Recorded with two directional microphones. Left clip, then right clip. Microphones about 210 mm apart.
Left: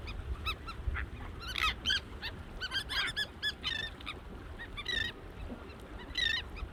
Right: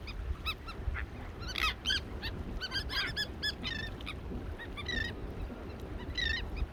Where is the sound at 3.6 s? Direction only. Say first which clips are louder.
Left 2 dB; 50° left (ahead or behind).